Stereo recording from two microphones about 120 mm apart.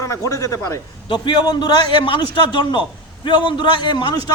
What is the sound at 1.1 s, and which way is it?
A man's voice, 40° left (ahead or behind).